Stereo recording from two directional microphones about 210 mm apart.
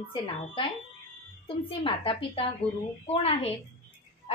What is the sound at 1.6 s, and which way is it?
Speech, 25° left (ahead or behind).